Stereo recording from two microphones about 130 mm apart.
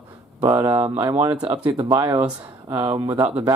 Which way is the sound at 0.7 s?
45° right (ahead or behind).